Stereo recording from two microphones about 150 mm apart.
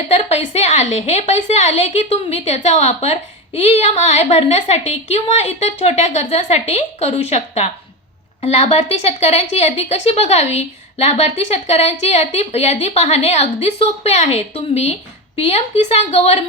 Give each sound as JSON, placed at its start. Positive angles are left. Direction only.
{"t": 0.1, "sound": "a woman's voice", "side_deg": 45}